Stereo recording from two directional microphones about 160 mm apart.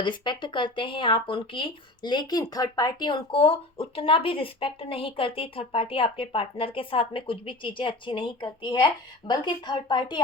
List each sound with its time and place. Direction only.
0.0 s speech: 30° left (ahead or behind)